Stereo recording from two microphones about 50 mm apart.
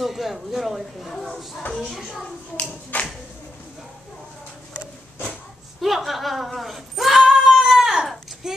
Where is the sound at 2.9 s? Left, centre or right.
Left.